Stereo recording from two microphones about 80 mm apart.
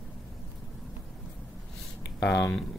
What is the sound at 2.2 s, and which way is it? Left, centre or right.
Speech, left.